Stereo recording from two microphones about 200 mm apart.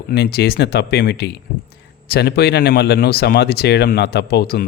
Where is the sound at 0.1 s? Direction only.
55° left (ahead or behind).